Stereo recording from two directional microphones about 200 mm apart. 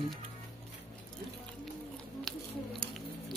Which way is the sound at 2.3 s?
5° left (ahead or behind).